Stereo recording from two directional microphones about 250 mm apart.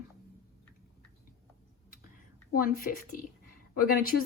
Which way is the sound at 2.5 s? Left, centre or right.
Left.